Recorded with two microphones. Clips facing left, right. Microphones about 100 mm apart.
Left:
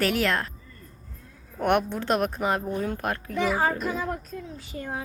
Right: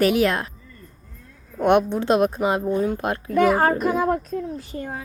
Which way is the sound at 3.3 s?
55° right (ahead or behind).